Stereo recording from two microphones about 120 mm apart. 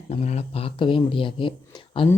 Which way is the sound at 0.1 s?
65° left (ahead or behind).